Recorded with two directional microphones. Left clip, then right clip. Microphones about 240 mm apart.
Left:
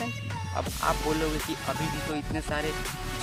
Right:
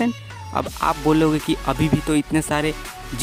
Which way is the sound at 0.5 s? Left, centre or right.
Right.